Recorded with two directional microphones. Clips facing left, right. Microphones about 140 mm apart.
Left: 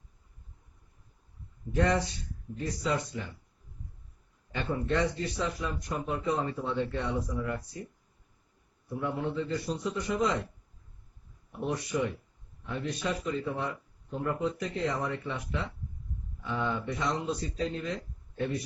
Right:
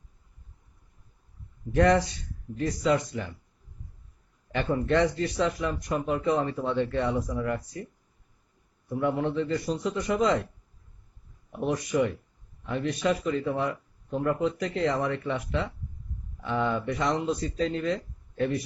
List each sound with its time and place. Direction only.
1.7 s speech: 90° right
4.5 s speech: 80° right
9.0 s speech: 75° right (ahead or behind)
11.9 s speech: 70° right (ahead or behind); by 13.7 s 90° right
14.1 s speech: 70° right (ahead or behind)